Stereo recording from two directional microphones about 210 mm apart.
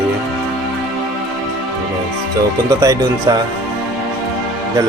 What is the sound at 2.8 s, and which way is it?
Speech, 15° right (ahead or behind).